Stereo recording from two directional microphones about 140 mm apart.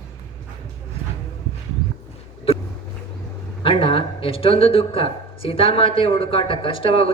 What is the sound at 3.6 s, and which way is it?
Speech, 40° left (ahead or behind).